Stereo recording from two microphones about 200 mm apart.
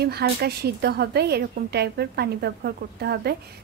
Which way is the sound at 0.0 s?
55° right (ahead or behind).